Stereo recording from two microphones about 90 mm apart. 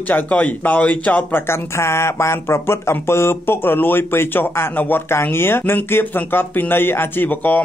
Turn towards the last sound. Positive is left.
turn(degrees=20)  # may be behind; listen again after turning